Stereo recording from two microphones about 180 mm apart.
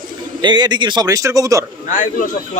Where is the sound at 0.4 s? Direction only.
25° right (ahead or behind).